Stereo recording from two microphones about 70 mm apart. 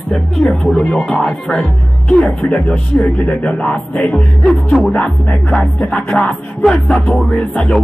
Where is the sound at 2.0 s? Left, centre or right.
Centre.